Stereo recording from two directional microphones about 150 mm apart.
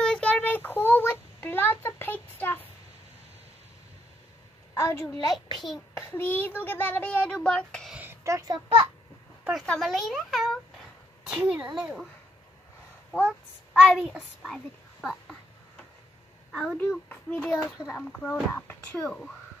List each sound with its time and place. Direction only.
0.0 s child singing: 5° left (ahead or behind)
4.7 s a woman's voice: 20° left (ahead or behind)
5.3 s a child's voice: centre (ahead or behind)
5.9 s a child's voice: 15° left (ahead or behind)
7.9 s a child's voice: 15° right (ahead or behind)
9.4 s a child's voice: centre (ahead or behind)
13.8 s a child's voice: 5° left (ahead or behind)
16.5 s a child's voice: 5° left (ahead or behind)
19.0 s a child's voice: 5° left (ahead or behind)